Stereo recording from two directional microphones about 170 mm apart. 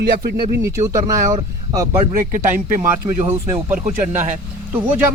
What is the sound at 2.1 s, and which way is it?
Speech, 50° right (ahead or behind).